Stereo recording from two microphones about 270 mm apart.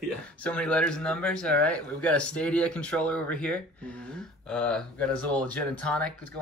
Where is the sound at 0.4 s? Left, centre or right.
Centre.